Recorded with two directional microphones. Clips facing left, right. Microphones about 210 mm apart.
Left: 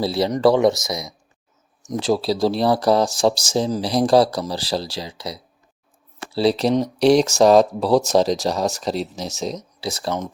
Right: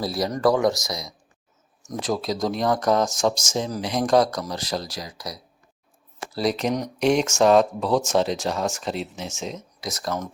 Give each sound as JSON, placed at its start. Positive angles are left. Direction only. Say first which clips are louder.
{"t": 0.0, "sound": "speech", "louder": "left 5 dB", "side_deg": 25}